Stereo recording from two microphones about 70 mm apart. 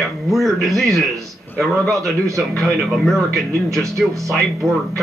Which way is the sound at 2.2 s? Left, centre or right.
Right.